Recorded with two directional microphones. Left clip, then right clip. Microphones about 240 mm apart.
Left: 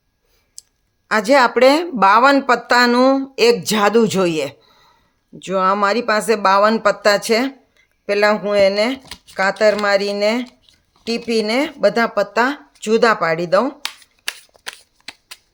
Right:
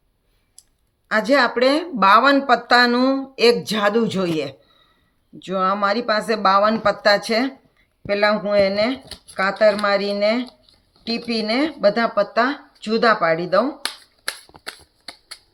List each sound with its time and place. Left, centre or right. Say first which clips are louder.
0.6 s clicking: left 10 dB; left
1.0 s speech: left 4 dB; left